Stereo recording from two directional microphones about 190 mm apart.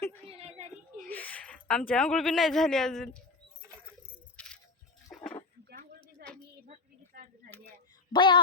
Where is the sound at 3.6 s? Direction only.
15° right (ahead or behind).